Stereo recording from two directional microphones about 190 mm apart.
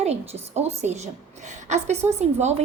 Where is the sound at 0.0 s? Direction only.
35° right (ahead or behind).